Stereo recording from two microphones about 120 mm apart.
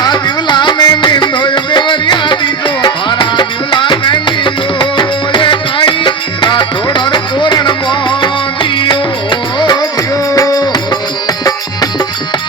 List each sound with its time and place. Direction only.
0.0 s music: 40° left (ahead or behind)
10.3 s music: 30° left (ahead or behind)